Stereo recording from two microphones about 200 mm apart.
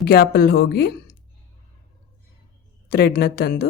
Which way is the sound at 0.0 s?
50° left (ahead or behind).